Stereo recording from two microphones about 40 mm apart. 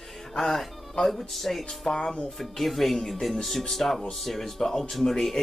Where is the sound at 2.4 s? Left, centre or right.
Centre.